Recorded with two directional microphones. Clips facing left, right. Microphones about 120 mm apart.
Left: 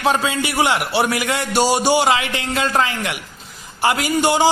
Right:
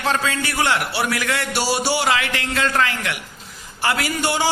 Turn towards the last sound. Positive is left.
turn(degrees=20)  # may be behind; listen again after turning